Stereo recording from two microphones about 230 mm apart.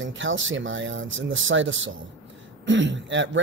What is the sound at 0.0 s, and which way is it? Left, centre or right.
Speech, right.